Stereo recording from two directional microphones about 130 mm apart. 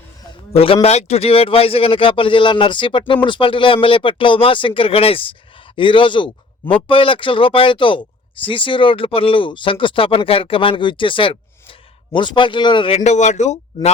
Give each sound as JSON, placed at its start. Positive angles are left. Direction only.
{"t": 0.5, "sound": "a man's voice", "side_deg": 50}
{"t": 13.0, "sound": "speech", "side_deg": 70}